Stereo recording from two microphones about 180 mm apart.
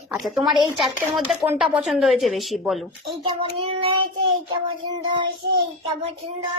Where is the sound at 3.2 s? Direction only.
30° right (ahead or behind).